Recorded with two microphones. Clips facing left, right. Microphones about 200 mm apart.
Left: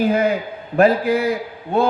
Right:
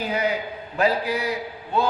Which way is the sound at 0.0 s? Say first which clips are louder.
Left 7 dB; 50° left (ahead or behind).